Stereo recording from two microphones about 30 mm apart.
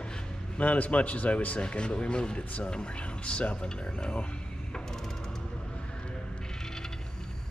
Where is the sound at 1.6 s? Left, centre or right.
Left.